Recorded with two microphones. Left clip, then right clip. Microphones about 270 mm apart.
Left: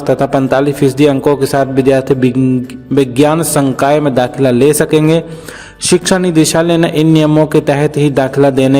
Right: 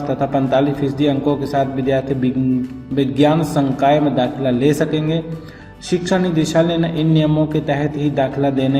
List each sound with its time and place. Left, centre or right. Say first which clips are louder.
0.1 s a man's voice: left 7 dB; left